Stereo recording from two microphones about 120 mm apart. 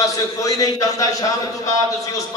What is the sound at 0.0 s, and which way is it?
Speech, 30° left (ahead or behind).